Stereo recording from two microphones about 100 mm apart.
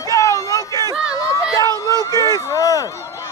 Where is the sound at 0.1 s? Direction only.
35° left (ahead or behind).